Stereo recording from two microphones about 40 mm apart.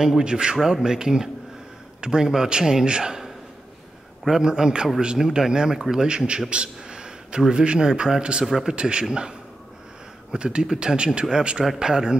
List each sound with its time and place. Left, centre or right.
0.2 s a man's voice: right
4.3 s a man's voice: centre
8.5 s a man's voice: centre
8.7 s speech: right
10.3 s a man's voice: right